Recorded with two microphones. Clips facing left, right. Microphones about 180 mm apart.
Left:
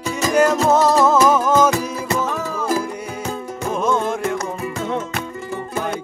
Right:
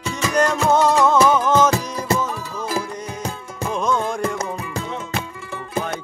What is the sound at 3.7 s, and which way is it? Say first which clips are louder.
Music: left 2 dB; 5° left (ahead or behind).